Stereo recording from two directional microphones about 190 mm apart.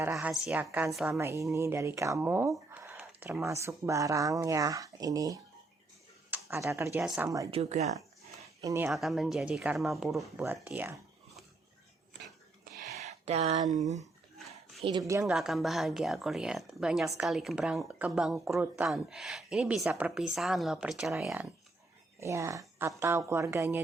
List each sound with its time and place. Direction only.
0.0 s speech: 15° right (ahead or behind)
1.2 s speech: 15° right (ahead or behind)
6.9 s speech: 5° right (ahead or behind)
7.5 s speech: 35° right (ahead or behind)
8.6 s speech: 15° right (ahead or behind)
8.9 s speech: centre (ahead or behind)
12.9 s a sound: 35° right (ahead or behind)
14.8 s speech: 25° right (ahead or behind)
15.3 s speech: centre (ahead or behind)
22.2 s speech: 15° right (ahead or behind)